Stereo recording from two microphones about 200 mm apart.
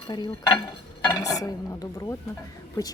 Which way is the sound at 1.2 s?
15° left (ahead or behind).